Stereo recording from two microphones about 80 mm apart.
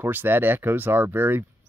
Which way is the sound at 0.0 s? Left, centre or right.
Right.